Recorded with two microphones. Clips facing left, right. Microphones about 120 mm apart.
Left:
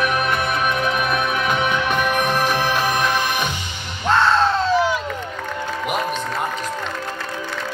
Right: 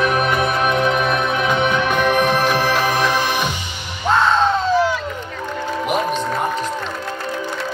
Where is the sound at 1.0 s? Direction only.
5° left (ahead or behind).